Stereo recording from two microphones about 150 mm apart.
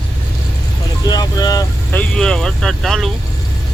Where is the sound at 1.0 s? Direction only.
25° left (ahead or behind).